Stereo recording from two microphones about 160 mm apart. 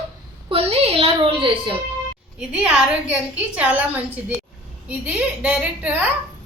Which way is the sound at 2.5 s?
5° right (ahead or behind).